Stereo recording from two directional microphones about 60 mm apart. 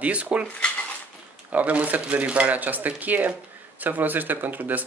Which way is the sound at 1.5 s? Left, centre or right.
Right.